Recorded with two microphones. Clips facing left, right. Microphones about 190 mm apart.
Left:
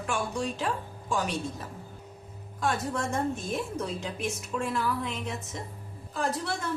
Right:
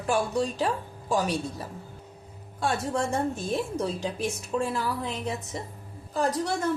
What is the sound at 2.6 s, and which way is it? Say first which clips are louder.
A woman's voice: right 2 dB; 30° right (ahead or behind).